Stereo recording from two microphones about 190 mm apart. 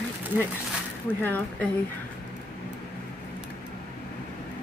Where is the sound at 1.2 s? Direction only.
10° left (ahead or behind).